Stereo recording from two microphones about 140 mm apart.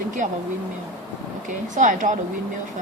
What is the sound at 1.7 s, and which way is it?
Speech, 60° right (ahead or behind).